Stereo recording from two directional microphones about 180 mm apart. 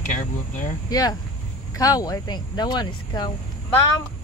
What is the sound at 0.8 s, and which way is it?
Speech, 20° left (ahead or behind).